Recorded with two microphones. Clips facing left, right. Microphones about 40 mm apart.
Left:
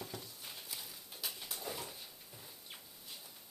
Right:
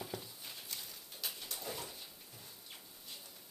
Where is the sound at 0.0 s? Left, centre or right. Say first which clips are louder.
Right 2 dB; centre.